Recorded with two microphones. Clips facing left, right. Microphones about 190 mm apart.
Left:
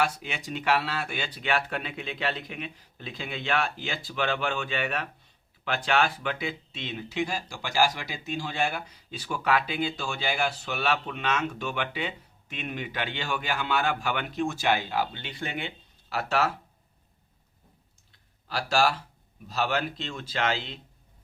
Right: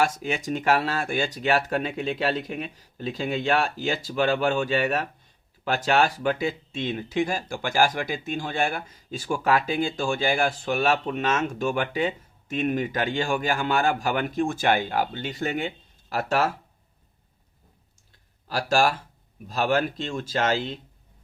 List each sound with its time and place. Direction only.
0.0 s speech: 45° right (ahead or behind)
18.4 s speech: 45° right (ahead or behind)